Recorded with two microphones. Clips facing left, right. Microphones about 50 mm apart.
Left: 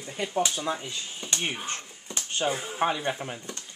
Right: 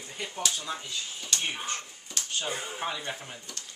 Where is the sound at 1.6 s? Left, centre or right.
Left.